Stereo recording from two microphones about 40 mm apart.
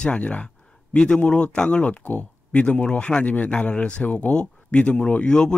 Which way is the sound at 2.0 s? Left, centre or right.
Left.